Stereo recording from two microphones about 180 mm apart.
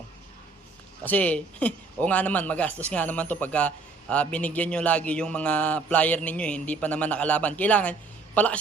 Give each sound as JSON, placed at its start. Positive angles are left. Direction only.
{"t": 1.0, "sound": "speech", "side_deg": 10}